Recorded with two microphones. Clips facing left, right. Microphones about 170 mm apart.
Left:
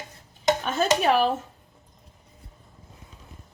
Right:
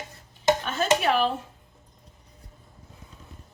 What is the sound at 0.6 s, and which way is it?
Speech, 40° left (ahead or behind).